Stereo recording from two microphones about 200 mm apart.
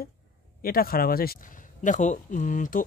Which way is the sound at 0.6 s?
45° left (ahead or behind).